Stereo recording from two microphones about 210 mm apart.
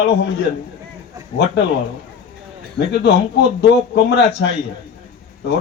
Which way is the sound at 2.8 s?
55° left (ahead or behind).